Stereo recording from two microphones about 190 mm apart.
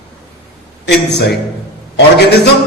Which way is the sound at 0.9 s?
60° left (ahead or behind).